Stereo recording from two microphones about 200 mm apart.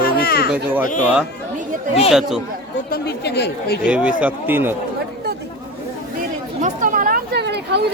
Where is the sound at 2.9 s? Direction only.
55° left (ahead or behind).